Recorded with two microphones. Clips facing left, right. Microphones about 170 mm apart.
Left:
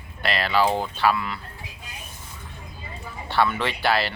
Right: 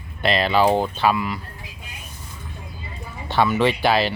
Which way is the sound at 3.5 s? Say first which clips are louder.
Right 5 dB; 15° right (ahead or behind).